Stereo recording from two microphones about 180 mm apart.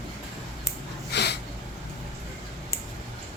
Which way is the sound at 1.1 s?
70° left (ahead or behind).